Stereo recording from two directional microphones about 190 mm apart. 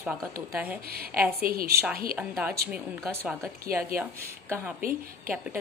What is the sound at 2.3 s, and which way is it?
A woman's voice, 10° right (ahead or behind).